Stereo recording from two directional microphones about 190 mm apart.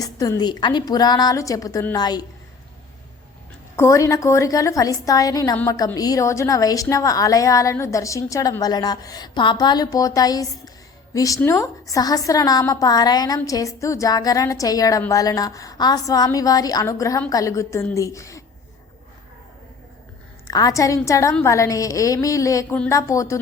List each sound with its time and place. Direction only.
0.0 s a woman's voice: 20° left (ahead or behind)
3.8 s a woman's voice: 15° left (ahead or behind)
20.5 s a woman's voice: 20° left (ahead or behind)